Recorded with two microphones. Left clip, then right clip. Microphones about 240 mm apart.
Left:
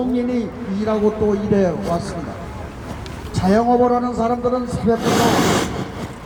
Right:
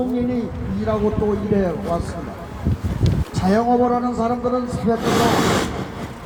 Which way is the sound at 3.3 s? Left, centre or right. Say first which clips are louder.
Left 2 dB; left.